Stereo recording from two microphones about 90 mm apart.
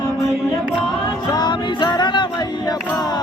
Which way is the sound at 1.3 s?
50° left (ahead or behind).